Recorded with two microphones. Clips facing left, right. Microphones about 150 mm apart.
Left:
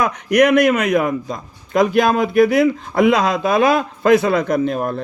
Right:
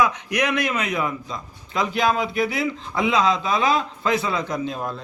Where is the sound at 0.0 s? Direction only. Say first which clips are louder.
Left 7 dB; 55° left (ahead or behind).